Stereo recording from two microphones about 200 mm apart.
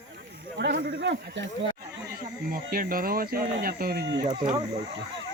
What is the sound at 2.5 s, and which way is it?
Speech, 45° right (ahead or behind).